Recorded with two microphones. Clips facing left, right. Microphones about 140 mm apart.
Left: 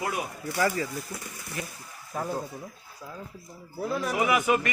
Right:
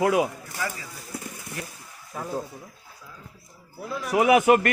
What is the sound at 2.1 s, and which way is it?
Speech, 10° left (ahead or behind).